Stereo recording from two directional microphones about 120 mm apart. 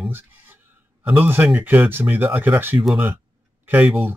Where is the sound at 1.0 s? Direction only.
15° right (ahead or behind).